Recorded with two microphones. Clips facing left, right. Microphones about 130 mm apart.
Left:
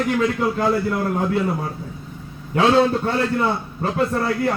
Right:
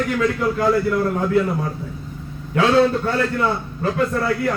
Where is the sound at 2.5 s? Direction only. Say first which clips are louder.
Even; 30° left (ahead or behind).